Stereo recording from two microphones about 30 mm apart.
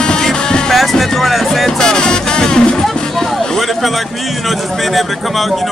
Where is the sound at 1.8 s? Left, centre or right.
Left.